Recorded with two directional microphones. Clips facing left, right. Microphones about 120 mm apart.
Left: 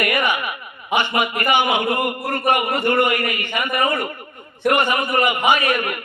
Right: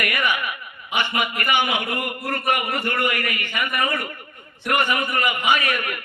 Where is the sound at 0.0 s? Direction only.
30° left (ahead or behind).